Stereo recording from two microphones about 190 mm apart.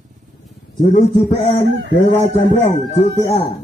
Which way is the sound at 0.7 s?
40° left (ahead or behind).